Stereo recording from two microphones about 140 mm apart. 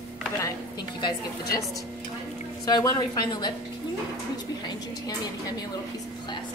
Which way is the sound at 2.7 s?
30° left (ahead or behind).